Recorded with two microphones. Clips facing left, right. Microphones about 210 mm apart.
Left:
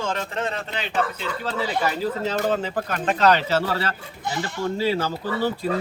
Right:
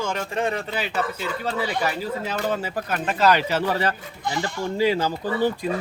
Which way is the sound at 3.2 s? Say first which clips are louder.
Even; 10° right (ahead or behind).